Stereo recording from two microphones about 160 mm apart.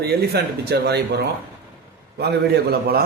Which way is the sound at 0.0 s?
90° right.